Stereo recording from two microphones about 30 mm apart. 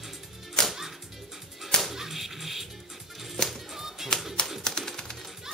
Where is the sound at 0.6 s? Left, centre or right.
Left.